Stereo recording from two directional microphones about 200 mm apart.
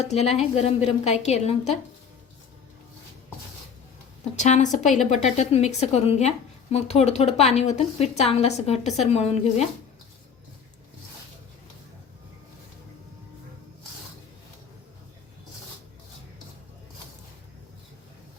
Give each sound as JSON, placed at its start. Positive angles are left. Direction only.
{"t": 0.0, "sound": "a woman's voice", "side_deg": 30}
{"t": 4.4, "sound": "a woman's voice", "side_deg": 35}